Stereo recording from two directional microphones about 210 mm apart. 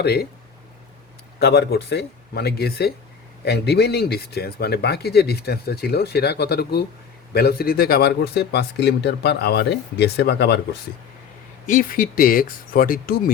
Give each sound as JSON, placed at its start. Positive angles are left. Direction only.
{"t": 0.0, "sound": "speech", "side_deg": 50}
{"t": 1.4, "sound": "speech", "side_deg": 50}
{"t": 11.6, "sound": "speech", "side_deg": 40}